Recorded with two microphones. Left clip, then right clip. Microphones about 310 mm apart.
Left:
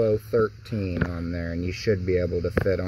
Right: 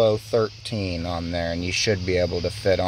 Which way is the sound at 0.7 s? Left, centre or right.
Right.